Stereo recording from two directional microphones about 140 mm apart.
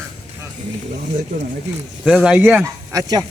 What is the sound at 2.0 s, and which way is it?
Speech, 5° right (ahead or behind).